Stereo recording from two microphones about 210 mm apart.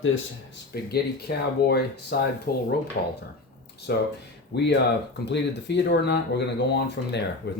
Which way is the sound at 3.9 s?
50° left (ahead or behind).